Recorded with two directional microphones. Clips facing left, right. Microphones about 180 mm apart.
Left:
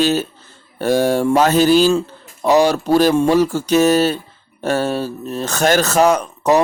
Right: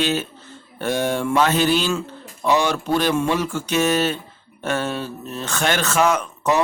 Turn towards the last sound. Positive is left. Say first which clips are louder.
# left 5 dB
turn(degrees=35)  # may be behind; listen again after turning